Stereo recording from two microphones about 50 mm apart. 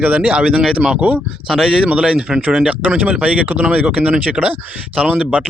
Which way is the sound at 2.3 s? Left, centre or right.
Right.